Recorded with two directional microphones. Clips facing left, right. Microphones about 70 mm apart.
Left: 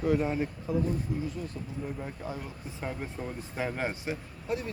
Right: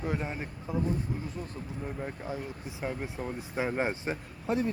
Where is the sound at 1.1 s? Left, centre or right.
Right.